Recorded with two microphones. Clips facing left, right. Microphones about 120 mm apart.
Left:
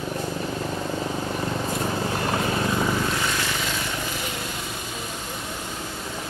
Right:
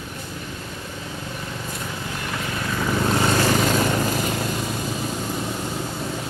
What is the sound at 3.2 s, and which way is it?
Vehicle, 40° right (ahead or behind).